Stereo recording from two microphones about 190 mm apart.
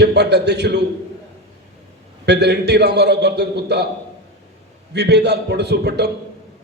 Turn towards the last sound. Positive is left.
turn(degrees=-60)  # may be behind; listen again after turning